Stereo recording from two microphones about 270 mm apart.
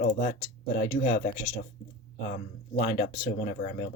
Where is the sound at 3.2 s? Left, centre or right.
Centre.